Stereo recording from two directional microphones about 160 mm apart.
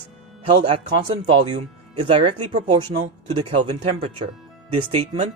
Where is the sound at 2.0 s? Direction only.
30° right (ahead or behind).